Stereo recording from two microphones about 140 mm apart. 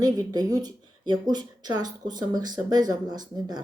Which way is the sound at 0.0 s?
25° right (ahead or behind).